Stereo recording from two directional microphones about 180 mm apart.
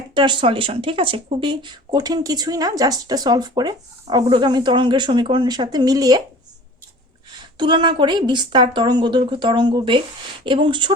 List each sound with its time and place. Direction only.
0.1 s speech: 25° right (ahead or behind)
7.6 s speech: 25° right (ahead or behind)